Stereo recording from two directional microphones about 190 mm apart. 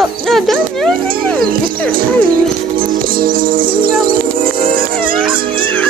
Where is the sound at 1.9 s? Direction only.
50° right (ahead or behind).